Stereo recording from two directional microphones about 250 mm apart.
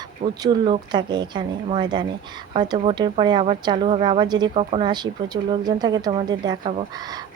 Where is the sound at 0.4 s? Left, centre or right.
Centre.